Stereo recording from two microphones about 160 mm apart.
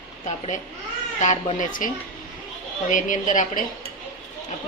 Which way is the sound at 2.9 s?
55° left (ahead or behind).